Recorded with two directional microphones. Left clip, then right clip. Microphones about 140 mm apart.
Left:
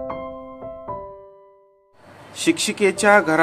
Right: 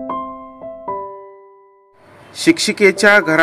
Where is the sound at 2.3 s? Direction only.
25° right (ahead or behind).